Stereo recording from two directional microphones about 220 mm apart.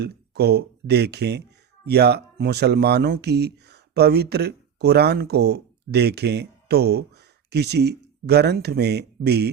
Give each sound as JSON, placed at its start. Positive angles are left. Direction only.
{"t": 0.0, "sound": "speech", "side_deg": -45}